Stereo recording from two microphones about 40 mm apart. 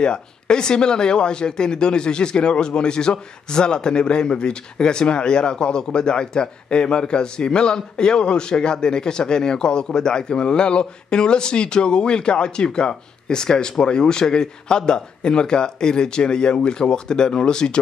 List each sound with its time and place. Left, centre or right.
0.0 s speech: left